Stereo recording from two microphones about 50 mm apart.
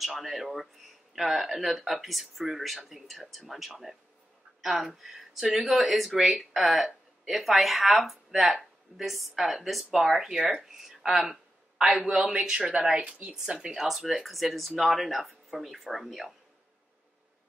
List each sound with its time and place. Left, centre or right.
0.0 s speech: centre
13.8 s speech: centre